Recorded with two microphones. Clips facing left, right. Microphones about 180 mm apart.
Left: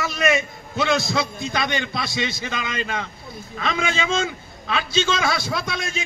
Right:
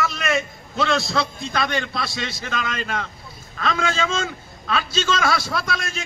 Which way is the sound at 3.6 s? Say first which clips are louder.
Right 1 dB; 15° left (ahead or behind).